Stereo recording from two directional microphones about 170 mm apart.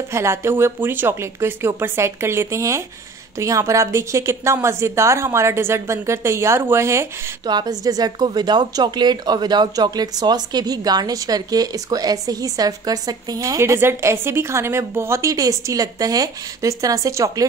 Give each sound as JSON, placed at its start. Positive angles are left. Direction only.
{"t": 0.1, "sound": "a woman's voice", "side_deg": -15}